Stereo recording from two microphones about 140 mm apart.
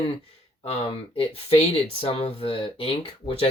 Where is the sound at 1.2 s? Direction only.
45° left (ahead or behind).